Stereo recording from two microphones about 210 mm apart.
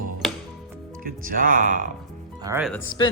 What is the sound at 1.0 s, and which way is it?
Speech, 40° right (ahead or behind).